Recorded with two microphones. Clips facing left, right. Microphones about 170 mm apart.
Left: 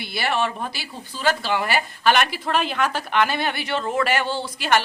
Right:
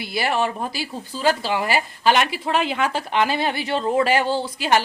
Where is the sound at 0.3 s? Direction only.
30° right (ahead or behind).